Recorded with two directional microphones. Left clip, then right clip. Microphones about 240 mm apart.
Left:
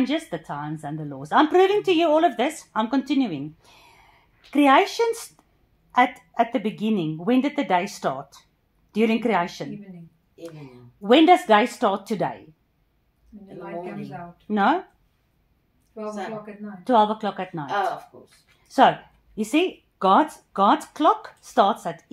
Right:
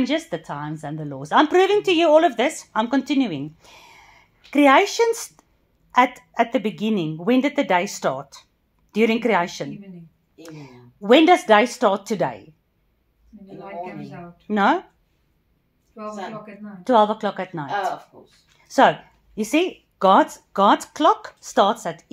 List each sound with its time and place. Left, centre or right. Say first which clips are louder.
0.0 s speech: right 2 dB; right
11.0 s speech: right 1 dB; right
14.5 s speech: right 2 dB; right
16.8 s speech: right 2 dB; right
18.7 s speech: right 1 dB; right